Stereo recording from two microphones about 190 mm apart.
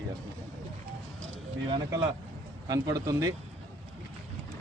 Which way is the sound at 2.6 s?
20° right (ahead or behind).